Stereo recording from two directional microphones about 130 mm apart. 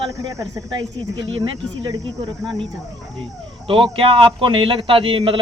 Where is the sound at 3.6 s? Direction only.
45° right (ahead or behind).